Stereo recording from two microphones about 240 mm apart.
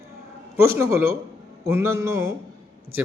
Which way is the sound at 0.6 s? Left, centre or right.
Centre.